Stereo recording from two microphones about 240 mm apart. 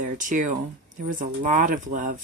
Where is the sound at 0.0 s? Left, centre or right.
Right.